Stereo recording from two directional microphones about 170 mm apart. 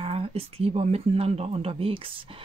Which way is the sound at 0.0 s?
35° right (ahead or behind).